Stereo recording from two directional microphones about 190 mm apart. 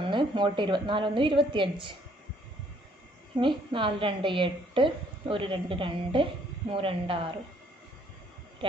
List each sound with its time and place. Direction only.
0.1 s a woman's voice: 25° right (ahead or behind)
3.3 s a woman's voice: 25° right (ahead or behind)